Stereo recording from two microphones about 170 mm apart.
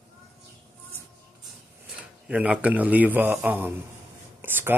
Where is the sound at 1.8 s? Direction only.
5° right (ahead or behind).